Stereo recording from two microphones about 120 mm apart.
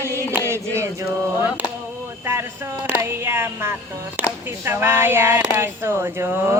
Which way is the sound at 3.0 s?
20° right (ahead or behind).